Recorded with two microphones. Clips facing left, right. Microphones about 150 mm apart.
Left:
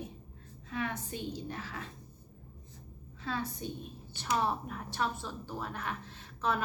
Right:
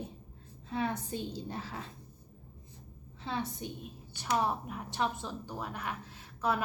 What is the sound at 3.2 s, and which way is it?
A woman's voice, 20° right (ahead or behind).